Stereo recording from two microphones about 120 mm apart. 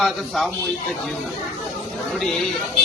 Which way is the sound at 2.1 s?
5° left (ahead or behind).